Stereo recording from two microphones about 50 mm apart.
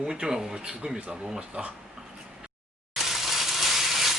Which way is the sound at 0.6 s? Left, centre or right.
Centre.